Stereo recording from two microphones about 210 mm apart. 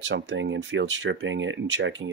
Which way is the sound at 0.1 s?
60° right (ahead or behind).